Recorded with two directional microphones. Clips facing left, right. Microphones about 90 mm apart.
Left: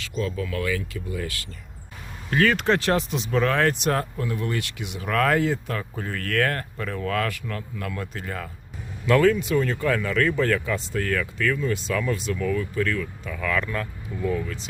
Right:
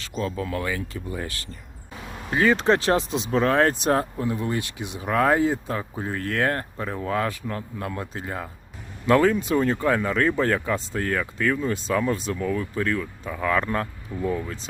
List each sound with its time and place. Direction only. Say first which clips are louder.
0.2 s speech: even; 30° right (ahead or behind)
2.3 s speech: right 1 dB; 20° right (ahead or behind)